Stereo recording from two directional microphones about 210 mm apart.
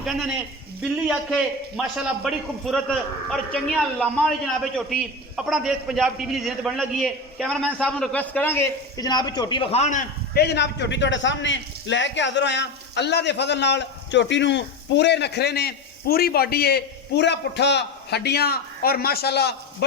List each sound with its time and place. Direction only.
0.0 s a man's voice: 5° right (ahead or behind); by 10.4 s 35° left (ahead or behind)
10.4 s a man's voice: 55° left (ahead or behind)